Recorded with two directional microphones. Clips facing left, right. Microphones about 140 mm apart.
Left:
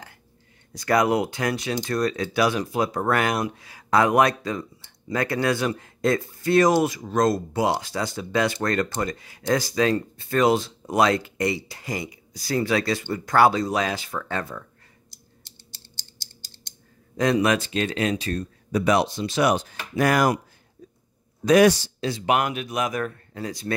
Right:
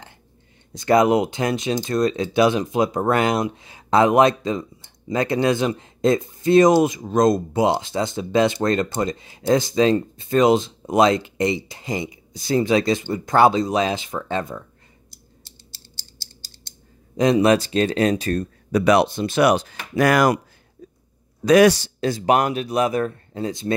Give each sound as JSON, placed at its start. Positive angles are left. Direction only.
{"t": 0.7, "sound": "speech", "side_deg": -25}
{"t": 15.7, "sound": "scissors", "side_deg": 20}
{"t": 17.2, "sound": "speech", "side_deg": -25}
{"t": 18.7, "sound": "speech", "side_deg": -75}
{"t": 21.5, "sound": "a man's voice", "side_deg": -85}
{"t": 22.0, "sound": "speech", "side_deg": -40}